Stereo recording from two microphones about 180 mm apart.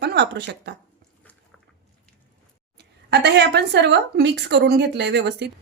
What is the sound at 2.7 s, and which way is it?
A woman's voice, 70° right (ahead or behind).